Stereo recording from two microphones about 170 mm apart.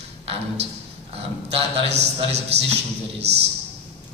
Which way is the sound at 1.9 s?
80° right.